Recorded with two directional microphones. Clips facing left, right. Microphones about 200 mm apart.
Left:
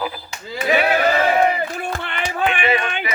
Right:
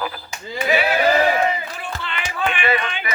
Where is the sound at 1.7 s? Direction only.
50° left (ahead or behind).